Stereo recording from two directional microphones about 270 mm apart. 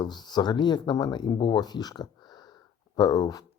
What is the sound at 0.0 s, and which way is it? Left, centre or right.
Speech, centre.